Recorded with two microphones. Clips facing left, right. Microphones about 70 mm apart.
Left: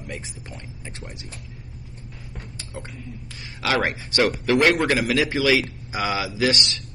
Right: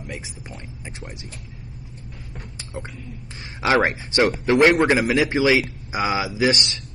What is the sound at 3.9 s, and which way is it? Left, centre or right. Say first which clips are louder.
Speech: right 2 dB; right.